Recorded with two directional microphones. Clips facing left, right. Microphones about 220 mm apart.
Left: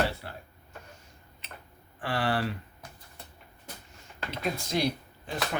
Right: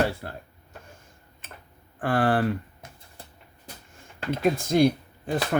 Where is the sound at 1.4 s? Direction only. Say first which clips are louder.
Right 1 dB; 50° right (ahead or behind).